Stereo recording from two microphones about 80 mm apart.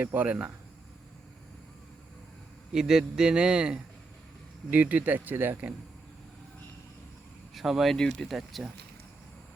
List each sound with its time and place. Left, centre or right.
0.0 s speech: right
2.7 s speech: centre
7.5 s speech: centre